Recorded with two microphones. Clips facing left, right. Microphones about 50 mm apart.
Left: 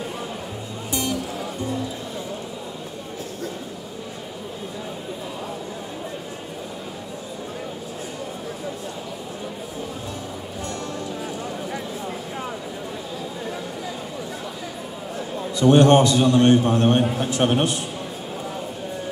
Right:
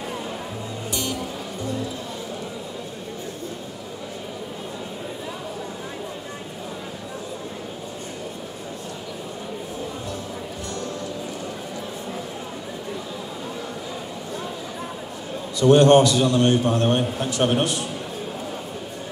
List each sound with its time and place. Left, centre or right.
15.6 s a man's voice: left